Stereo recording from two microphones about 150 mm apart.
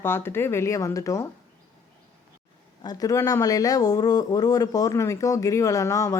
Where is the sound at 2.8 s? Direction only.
25° left (ahead or behind).